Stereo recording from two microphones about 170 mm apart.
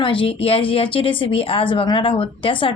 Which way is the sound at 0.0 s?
30° left (ahead or behind).